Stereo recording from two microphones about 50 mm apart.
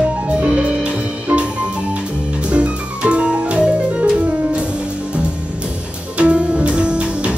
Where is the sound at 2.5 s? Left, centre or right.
Right.